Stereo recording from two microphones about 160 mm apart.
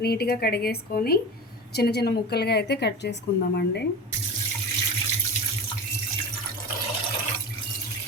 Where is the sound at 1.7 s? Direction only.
90° left.